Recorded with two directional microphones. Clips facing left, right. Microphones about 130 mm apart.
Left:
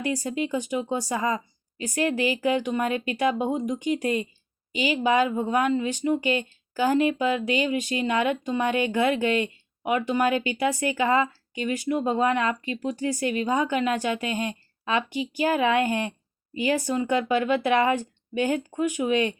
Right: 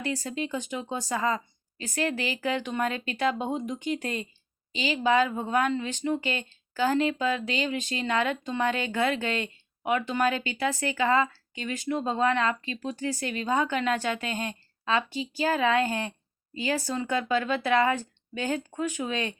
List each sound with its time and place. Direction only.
0.0 s a woman's voice: 15° left (ahead or behind)